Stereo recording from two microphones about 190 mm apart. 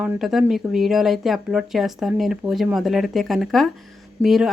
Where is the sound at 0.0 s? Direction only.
5° right (ahead or behind).